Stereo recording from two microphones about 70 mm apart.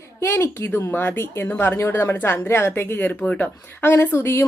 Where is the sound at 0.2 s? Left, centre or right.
Left.